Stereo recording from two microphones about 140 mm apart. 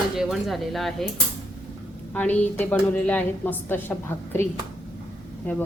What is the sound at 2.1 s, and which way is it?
Speech, 10° left (ahead or behind).